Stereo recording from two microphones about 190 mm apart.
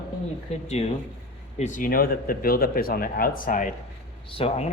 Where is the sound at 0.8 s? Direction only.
35° left (ahead or behind).